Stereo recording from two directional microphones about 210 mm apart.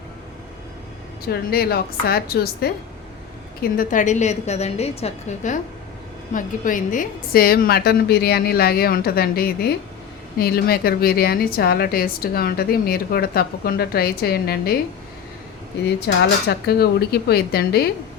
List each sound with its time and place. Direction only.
1.3 s a woman's voice: 50° left (ahead or behind)
16.0 s a woman's voice: 50° left (ahead or behind)